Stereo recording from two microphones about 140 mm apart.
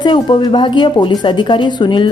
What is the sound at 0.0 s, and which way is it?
A woman's voice, 35° left (ahead or behind).